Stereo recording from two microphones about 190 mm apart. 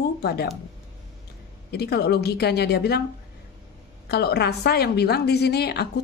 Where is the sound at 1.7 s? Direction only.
60° left (ahead or behind).